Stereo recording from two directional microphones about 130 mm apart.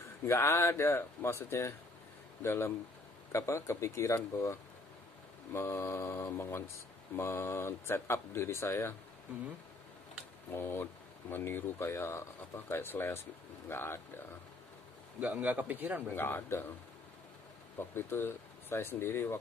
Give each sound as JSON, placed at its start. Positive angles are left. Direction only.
{"t": 0.3, "sound": "speech", "side_deg": 20}
{"t": 10.5, "sound": "speech", "side_deg": 15}
{"t": 15.1, "sound": "a man's voice", "side_deg": -10}
{"t": 16.1, "sound": "speech", "side_deg": 15}
{"t": 17.7, "sound": "speech", "side_deg": 15}